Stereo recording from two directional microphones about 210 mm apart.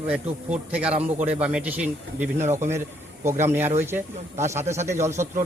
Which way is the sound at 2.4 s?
35° right (ahead or behind).